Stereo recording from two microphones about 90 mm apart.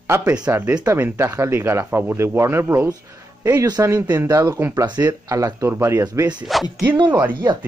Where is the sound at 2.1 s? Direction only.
30° right (ahead or behind).